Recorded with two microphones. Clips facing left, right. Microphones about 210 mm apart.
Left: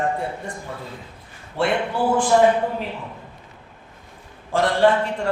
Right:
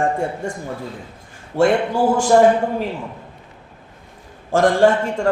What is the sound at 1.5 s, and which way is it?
Speech, 45° right (ahead or behind).